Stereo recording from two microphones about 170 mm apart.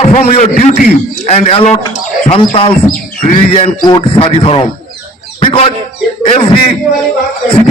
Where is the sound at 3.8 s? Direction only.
25° left (ahead or behind).